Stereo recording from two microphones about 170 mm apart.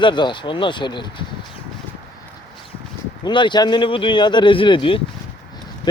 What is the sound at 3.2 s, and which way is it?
Speech, 30° left (ahead or behind).